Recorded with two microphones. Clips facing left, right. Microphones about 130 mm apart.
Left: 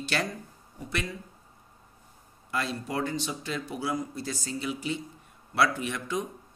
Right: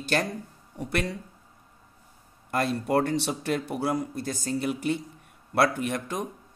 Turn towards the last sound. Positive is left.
turn(degrees=-50)  # may be behind; listen again after turning